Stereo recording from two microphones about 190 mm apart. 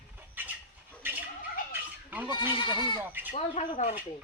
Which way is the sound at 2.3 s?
25° left (ahead or behind).